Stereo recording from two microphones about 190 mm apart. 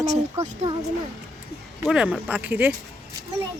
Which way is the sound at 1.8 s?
5° right (ahead or behind).